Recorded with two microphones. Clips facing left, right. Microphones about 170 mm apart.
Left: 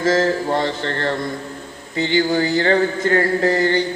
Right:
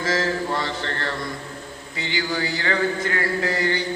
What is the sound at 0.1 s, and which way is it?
Mantra, 30° left (ahead or behind).